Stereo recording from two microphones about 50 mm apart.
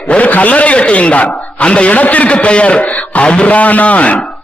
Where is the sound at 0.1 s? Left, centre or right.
Left.